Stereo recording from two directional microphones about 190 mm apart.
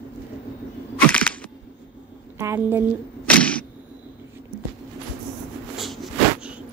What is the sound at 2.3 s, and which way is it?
Speech, 15° right (ahead or behind).